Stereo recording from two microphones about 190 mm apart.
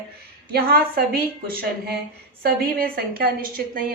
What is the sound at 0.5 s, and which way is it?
A woman's voice, 55° right (ahead or behind).